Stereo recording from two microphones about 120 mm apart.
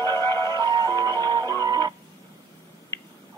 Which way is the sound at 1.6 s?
35° right (ahead or behind).